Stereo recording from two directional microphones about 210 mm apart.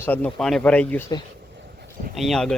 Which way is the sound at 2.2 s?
Centre (ahead or behind).